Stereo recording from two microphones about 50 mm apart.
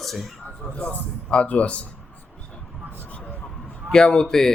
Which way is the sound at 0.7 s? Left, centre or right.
Left.